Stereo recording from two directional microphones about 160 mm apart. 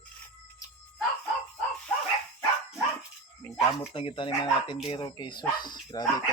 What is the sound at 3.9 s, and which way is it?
Speech, 30° left (ahead or behind).